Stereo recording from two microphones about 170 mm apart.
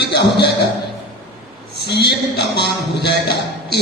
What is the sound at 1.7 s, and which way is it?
A man's voice, 80° left.